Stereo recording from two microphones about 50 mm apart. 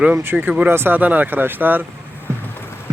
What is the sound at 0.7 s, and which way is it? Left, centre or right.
Speech, right.